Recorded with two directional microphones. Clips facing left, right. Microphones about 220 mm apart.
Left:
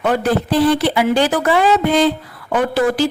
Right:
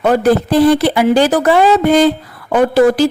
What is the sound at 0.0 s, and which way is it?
A woman's voice, 40° right (ahead or behind).